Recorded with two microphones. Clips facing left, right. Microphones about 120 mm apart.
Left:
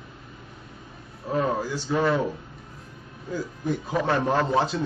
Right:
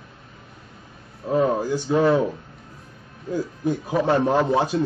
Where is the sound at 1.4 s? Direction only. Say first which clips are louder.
Right 5 dB; 15° right (ahead or behind).